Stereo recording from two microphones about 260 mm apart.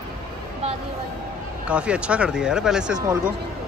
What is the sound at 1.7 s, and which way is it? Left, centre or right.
Speech, centre.